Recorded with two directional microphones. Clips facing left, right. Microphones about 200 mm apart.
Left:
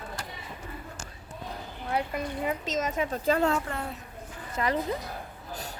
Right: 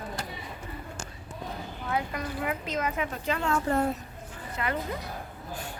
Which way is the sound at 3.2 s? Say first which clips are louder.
Left 7 dB; 40° left (ahead or behind).